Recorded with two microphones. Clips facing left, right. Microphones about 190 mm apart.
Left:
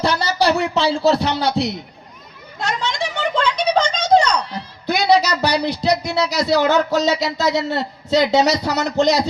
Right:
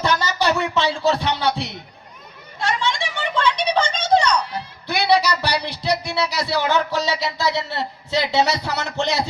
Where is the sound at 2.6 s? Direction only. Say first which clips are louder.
Even; 40° left (ahead or behind).